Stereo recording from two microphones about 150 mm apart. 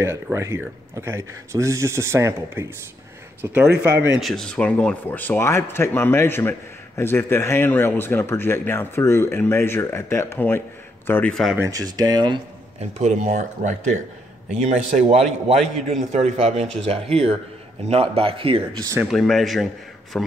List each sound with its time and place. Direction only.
0.0 s speech: 20° right (ahead or behind); by 11.5 s 5° left (ahead or behind)
11.5 s speech: 20° right (ahead or behind)
13.0 s a man's voice: 55° right (ahead or behind); by 18.8 s 35° right (ahead or behind)
18.9 s a man's voice: centre (ahead or behind)